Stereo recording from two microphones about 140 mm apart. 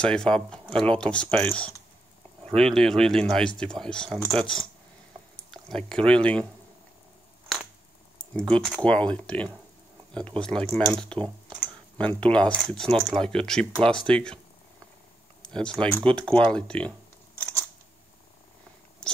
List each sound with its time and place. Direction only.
0.0 s speech: 5° left (ahead or behind)
8.4 s speech: 5° left (ahead or behind)
15.4 s speech: 5° left (ahead or behind)